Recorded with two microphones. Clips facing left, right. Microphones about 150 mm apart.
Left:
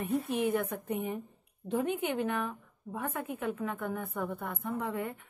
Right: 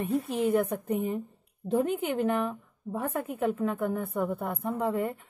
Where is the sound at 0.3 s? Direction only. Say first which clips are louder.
Right 4 dB; 35° right (ahead or behind).